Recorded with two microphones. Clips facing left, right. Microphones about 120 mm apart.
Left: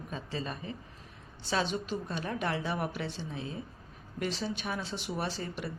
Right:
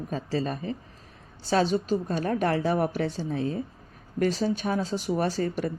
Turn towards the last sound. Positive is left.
turn(degrees=-45)  # may be behind; listen again after turning